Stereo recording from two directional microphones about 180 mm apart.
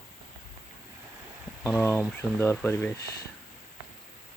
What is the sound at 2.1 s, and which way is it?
Speech, 10° left (ahead or behind).